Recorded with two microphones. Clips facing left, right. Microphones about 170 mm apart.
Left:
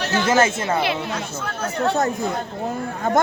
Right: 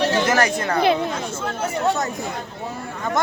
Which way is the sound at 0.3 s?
25° left (ahead or behind).